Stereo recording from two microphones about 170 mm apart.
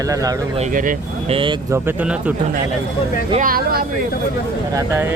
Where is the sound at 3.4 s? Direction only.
60° right (ahead or behind).